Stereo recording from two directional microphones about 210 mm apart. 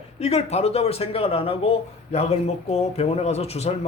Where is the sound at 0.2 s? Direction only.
30° left (ahead or behind).